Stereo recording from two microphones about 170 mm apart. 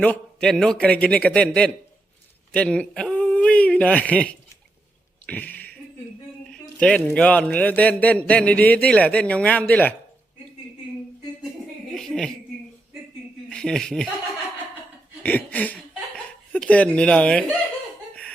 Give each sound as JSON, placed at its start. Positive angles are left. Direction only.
{"t": 0.0, "sound": "a man's voice", "side_deg": 5}
{"t": 5.2, "sound": "a sound", "side_deg": 10}
{"t": 6.5, "sound": "a man's voice", "side_deg": 5}
{"t": 11.9, "sound": "a sound", "side_deg": 0}
{"t": 13.5, "sound": "speech", "side_deg": 5}
{"t": 15.2, "sound": "speech", "side_deg": 10}